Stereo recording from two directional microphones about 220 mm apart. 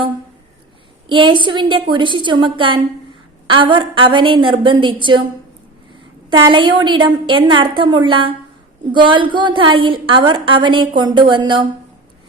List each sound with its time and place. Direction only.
1.0 s a woman's voice: 20° right (ahead or behind)
6.5 s a woman's voice: 20° right (ahead or behind)